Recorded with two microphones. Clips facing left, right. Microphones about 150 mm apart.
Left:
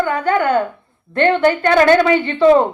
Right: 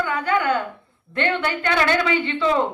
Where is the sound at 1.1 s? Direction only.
45° left (ahead or behind).